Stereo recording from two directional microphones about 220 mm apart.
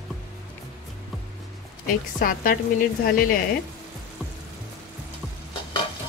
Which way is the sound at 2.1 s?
40° left (ahead or behind).